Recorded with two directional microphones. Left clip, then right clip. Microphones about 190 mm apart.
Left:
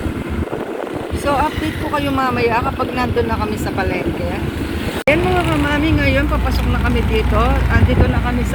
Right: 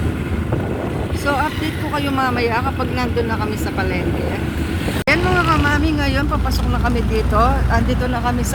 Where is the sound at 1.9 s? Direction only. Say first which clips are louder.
Left 1 dB; centre (ahead or behind).